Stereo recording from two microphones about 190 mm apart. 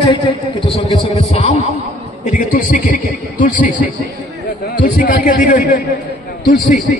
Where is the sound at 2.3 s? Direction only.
45° left (ahead or behind).